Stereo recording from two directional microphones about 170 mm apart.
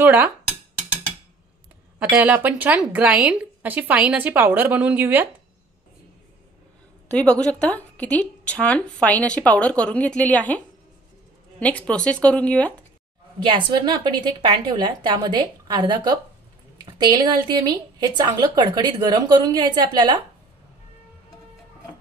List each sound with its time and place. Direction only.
0.0 s speech: 10° right (ahead or behind)
2.1 s speech: 10° right (ahead or behind)
7.1 s a woman's voice: 5° left (ahead or behind)
11.6 s a woman's voice: 5° left (ahead or behind)
13.4 s a woman's voice: 30° right (ahead or behind)